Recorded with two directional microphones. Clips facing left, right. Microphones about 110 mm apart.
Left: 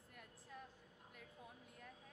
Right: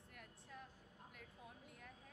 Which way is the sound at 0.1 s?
Centre (ahead or behind).